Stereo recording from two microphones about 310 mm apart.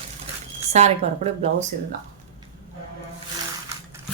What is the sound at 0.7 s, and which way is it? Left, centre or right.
Speech, right.